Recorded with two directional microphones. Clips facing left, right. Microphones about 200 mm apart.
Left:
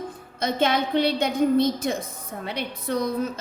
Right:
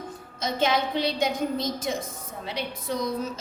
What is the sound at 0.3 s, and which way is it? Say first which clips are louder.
A woman's voice: left 2 dB; 55° left (ahead or behind).